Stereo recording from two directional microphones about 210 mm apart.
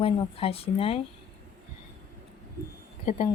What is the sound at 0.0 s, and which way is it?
A woman's voice, 25° left (ahead or behind).